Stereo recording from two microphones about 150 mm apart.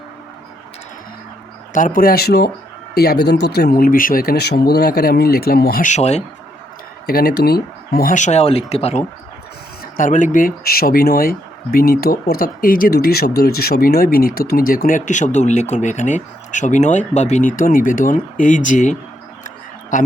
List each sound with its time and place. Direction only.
1.7 s speech: 60° left (ahead or behind); by 5.9 s 85° left
5.9 s speech: 45° left (ahead or behind)
7.1 s speech: 90° left; by 9.0 s 45° left (ahead or behind)
9.8 s speech: 60° left (ahead or behind)